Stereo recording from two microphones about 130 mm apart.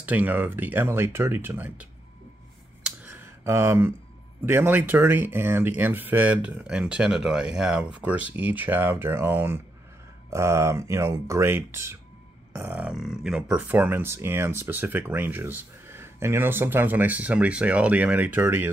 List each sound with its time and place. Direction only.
0.0 s speech: 10° right (ahead or behind)
2.8 s a sound: 15° right (ahead or behind)
4.5 s speech: 15° right (ahead or behind)
12.9 s speech: centre (ahead or behind); by 18.7 s 15° right (ahead or behind)